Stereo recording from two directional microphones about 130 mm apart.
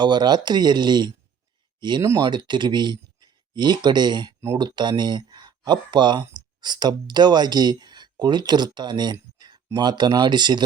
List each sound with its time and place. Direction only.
0.0 s speech: 35° right (ahead or behind)
9.1 s a sound: 30° right (ahead or behind)
9.7 s speech: 35° right (ahead or behind)